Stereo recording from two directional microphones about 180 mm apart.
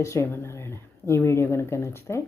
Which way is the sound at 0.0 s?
15° left (ahead or behind).